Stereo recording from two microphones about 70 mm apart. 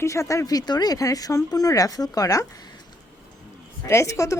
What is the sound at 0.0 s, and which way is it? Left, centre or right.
Speech, left.